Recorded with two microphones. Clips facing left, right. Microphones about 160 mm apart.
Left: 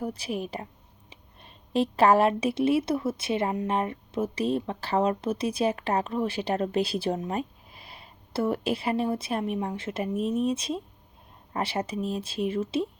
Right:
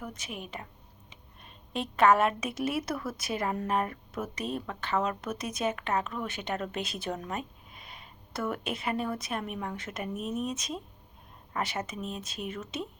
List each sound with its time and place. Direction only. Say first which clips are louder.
0.0 s a woman's voice: left 9 dB; 35° left (ahead or behind)